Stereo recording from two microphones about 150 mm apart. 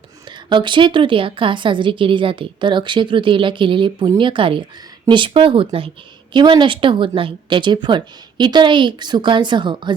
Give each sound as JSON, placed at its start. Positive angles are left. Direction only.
{"t": 0.3, "sound": "a woman's voice", "side_deg": -30}